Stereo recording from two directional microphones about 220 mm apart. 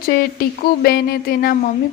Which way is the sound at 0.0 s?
45° left (ahead or behind).